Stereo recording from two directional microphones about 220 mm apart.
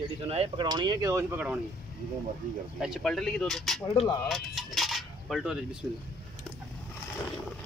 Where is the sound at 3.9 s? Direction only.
25° left (ahead or behind).